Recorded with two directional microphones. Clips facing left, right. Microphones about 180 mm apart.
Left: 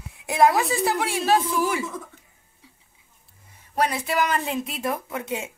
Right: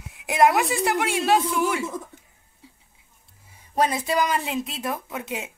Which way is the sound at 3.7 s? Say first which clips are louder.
Right 1 dB; 20° right (ahead or behind).